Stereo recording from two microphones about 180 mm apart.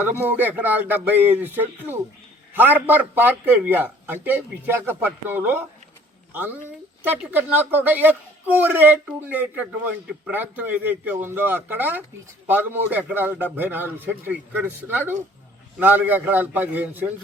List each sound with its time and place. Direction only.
0.3 s a man's voice: 10° right (ahead or behind)